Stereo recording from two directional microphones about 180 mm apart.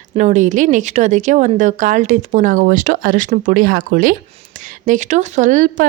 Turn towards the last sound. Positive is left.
turn(degrees=-45)  # may be behind; listen again after turning